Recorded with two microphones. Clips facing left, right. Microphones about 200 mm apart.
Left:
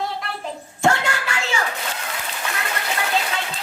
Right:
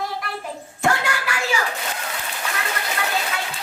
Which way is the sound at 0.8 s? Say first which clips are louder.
Left 2 dB; 25° left (ahead or behind).